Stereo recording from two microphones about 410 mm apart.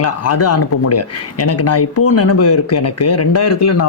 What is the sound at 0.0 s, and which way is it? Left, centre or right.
Speech, left.